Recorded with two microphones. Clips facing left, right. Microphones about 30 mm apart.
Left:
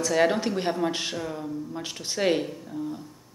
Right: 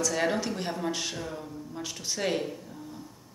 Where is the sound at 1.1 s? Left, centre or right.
Centre.